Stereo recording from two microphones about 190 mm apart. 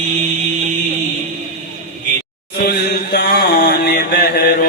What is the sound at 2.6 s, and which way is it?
Chant, 55° left (ahead or behind).